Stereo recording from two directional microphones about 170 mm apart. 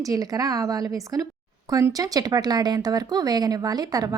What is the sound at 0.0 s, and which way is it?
Speech, 20° right (ahead or behind).